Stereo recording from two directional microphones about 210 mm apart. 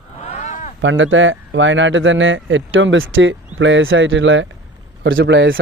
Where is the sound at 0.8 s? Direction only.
65° right (ahead or behind).